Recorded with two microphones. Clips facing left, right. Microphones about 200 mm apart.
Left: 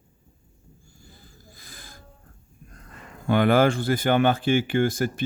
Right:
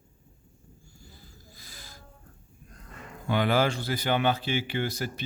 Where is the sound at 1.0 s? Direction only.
50° left (ahead or behind).